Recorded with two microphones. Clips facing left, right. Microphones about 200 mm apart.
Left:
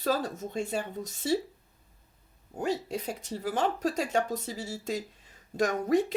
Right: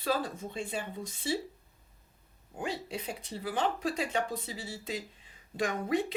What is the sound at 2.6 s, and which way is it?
Speech, 45° left (ahead or behind).